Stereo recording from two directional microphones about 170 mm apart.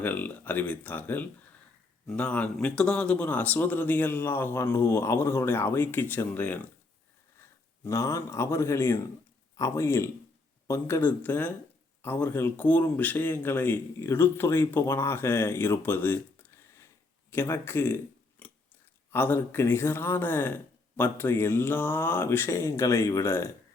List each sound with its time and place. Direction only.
0.0 s speech: 10° left (ahead or behind)
7.9 s speech: 15° left (ahead or behind)